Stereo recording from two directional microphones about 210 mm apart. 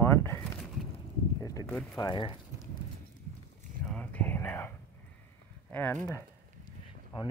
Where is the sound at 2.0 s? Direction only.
20° left (ahead or behind).